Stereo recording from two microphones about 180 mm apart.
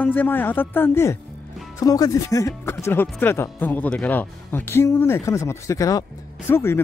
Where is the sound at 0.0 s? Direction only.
10° left (ahead or behind).